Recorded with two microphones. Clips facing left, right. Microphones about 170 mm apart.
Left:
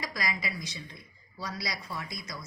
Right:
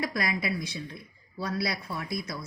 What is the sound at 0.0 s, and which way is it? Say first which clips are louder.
A woman's voice: right 5 dB; 60° right (ahead or behind).